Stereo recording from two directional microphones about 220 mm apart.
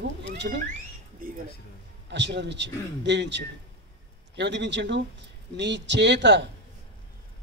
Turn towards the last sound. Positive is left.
turn(degrees=-50)  # may be behind; listen again after turning